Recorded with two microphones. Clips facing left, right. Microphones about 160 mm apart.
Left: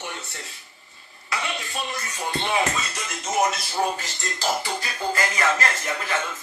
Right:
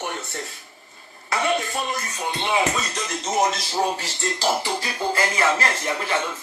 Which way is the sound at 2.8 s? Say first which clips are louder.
Right 3 dB; 30° right (ahead or behind).